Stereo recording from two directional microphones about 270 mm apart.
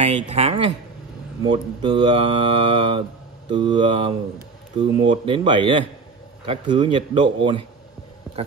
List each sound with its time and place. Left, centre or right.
0.0 s a man's voice: right